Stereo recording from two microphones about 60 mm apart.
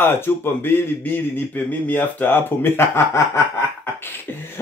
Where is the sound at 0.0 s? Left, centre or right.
Left.